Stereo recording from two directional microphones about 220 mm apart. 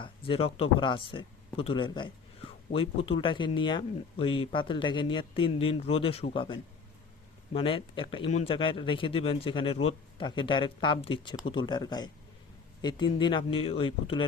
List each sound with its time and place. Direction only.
0.0 s speech: 25° left (ahead or behind)